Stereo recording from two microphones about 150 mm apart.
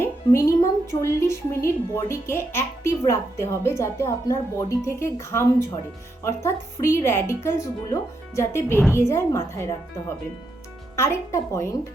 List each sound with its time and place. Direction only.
0.0 s speech: 20° left (ahead or behind)
10.9 s speech: 15° left (ahead or behind)